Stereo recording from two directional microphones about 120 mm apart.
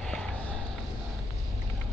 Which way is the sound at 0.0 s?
5° left (ahead or behind).